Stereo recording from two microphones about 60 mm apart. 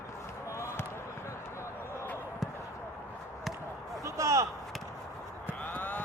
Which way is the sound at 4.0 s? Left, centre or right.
Right.